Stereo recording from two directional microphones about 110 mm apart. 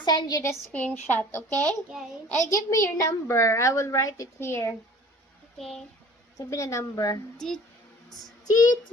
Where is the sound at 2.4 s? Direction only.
30° left (ahead or behind).